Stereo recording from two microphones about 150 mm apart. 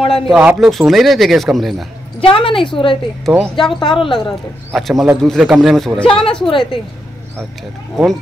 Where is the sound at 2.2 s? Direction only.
35° left (ahead or behind).